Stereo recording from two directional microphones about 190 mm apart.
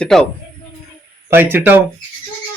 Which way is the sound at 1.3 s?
10° right (ahead or behind).